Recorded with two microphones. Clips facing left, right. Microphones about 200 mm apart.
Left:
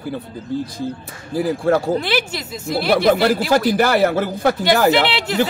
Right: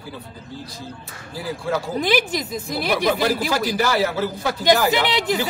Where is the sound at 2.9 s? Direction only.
55° left (ahead or behind).